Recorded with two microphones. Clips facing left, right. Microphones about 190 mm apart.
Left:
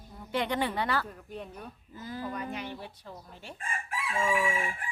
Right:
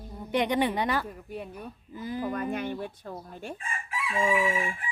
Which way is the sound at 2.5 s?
50° right (ahead or behind).